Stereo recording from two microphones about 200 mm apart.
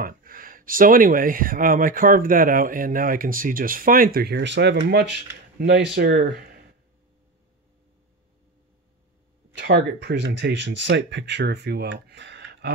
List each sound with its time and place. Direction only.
0.0 s speech: 45° right (ahead or behind)
9.6 s speech: 55° right (ahead or behind)